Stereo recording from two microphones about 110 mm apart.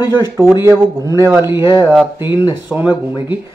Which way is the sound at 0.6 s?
25° right (ahead or behind).